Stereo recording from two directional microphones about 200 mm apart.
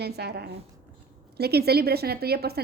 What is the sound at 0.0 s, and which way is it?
A woman's voice, 55° right (ahead or behind).